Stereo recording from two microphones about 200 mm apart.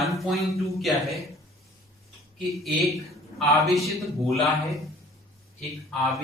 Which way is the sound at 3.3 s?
Centre (ahead or behind).